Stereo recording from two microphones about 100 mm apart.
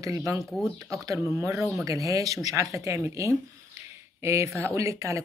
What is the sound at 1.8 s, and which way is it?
Speech, 35° right (ahead or behind).